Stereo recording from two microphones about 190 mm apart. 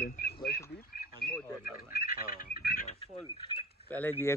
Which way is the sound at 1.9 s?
50° left (ahead or behind).